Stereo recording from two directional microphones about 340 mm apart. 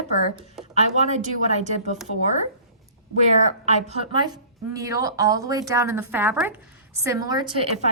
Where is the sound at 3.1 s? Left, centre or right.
Centre.